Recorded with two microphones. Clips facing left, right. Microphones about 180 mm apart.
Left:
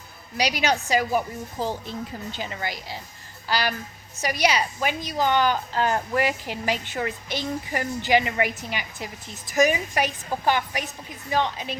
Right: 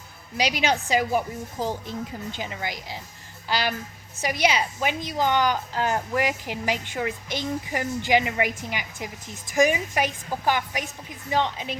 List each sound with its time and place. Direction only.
0.3 s a woman's voice: 20° right (ahead or behind)